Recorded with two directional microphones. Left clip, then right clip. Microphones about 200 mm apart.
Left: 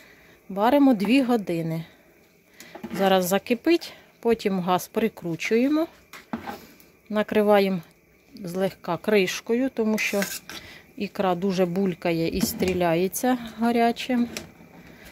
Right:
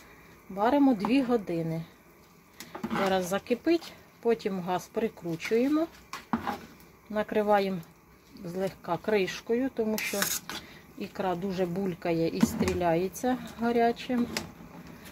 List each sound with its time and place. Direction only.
0.6 s speech: 45° left (ahead or behind)
3.1 s speech: 45° left (ahead or behind)
7.1 s speech: 45° left (ahead or behind)